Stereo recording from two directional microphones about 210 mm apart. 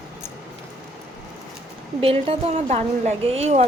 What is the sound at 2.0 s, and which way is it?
A woman's voice, 25° right (ahead or behind).